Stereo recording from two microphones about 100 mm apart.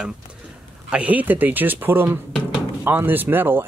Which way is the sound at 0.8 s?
15° right (ahead or behind).